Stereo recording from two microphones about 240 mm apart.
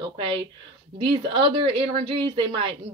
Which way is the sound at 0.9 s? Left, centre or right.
Right.